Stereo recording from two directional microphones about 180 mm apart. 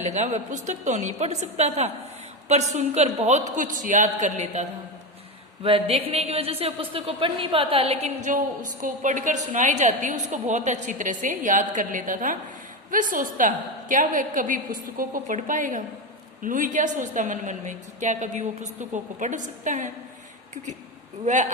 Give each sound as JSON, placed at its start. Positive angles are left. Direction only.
{"t": 0.0, "sound": "a woman's voice", "side_deg": -40}
{"t": 5.6, "sound": "a woman's voice", "side_deg": -30}